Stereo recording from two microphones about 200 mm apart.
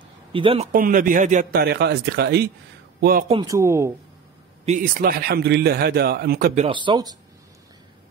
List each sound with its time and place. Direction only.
0.3 s speech: 25° right (ahead or behind)
0.7 s a man's voice: 45° right (ahead or behind)
3.4 s speech: 15° right (ahead or behind)
4.6 s a man's voice: 40° right (ahead or behind)
6.6 s speech: 25° right (ahead or behind)